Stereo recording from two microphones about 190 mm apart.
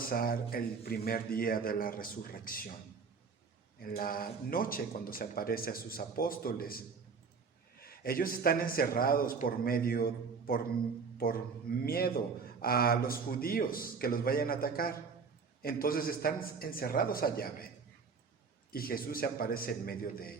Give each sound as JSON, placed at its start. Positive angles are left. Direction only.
{"t": 0.1, "sound": "a man's voice", "side_deg": 50}
{"t": 3.8, "sound": "a man's voice", "side_deg": 50}
{"t": 18.7, "sound": "a man's voice", "side_deg": 50}